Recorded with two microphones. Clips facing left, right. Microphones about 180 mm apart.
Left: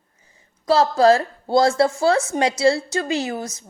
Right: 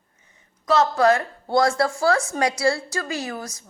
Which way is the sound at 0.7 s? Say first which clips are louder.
Left 3 dB; 30° left (ahead or behind).